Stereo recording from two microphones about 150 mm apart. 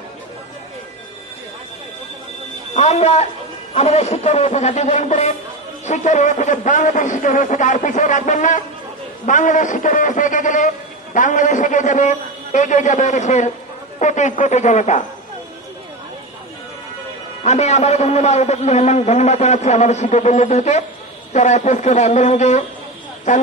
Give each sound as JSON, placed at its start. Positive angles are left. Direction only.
{"t": 2.7, "sound": "a man's voice", "side_deg": 50}
{"t": 17.4, "sound": "a man's voice", "side_deg": 50}